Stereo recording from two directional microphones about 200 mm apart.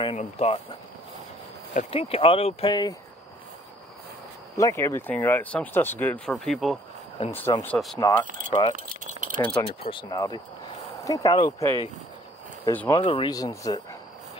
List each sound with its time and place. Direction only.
0.0 s speech: 30° left (ahead or behind)
1.7 s speech: 35° left (ahead or behind)
4.6 s speech: 15° left (ahead or behind)
7.2 s speech: 15° left (ahead or behind)
8.8 s keys jangling: 40° right (ahead or behind)
9.6 s speech: 25° left (ahead or behind)